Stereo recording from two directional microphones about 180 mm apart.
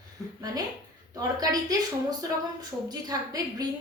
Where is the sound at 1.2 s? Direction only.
20° right (ahead or behind).